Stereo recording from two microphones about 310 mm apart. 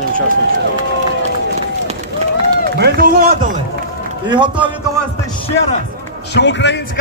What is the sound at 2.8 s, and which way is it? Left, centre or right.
Speech, right.